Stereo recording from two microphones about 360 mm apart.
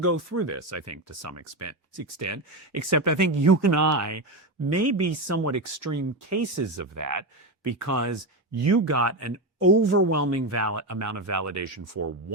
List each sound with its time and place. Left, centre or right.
0.0 s speech: right